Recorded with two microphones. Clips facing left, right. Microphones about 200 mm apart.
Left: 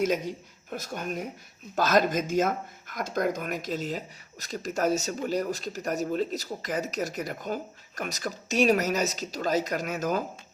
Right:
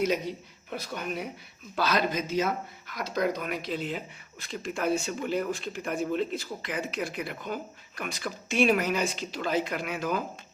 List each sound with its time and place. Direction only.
0.0 s speech: 50° left (ahead or behind)